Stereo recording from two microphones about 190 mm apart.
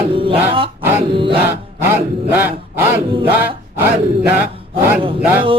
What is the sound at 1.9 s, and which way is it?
Speech, 10° right (ahead or behind).